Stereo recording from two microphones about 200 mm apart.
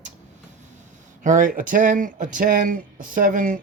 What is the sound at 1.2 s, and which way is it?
Speech, 40° right (ahead or behind).